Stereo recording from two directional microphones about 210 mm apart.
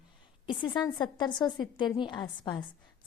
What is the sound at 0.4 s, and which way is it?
A woman's voice, 20° left (ahead or behind).